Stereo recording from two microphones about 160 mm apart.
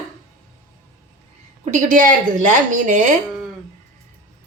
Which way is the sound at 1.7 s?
55° right (ahead or behind).